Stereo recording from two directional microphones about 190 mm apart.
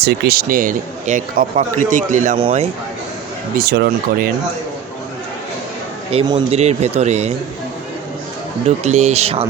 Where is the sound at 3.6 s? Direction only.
55° right (ahead or behind).